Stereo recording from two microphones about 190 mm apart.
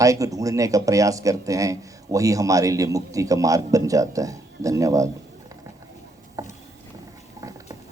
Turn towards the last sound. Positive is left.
turn(degrees=-20)  # may be behind; listen again after turning